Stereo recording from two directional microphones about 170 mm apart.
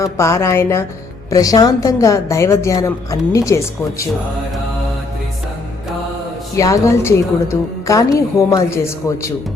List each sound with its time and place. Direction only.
0.0 s a woman's voice: 15° left (ahead or behind)
6.6 s a woman's voice: 15° left (ahead or behind)